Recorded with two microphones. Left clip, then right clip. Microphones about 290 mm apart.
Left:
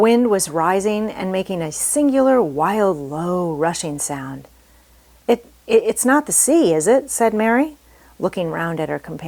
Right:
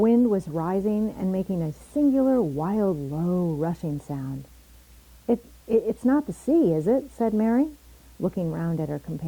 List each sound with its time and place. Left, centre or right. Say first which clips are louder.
0.0 s a woman's voice: left 7 dB; centre